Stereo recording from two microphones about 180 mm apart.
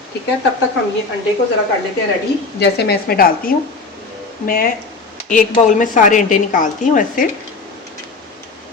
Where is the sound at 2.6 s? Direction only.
65° left (ahead or behind); by 7.3 s 45° left (ahead or behind).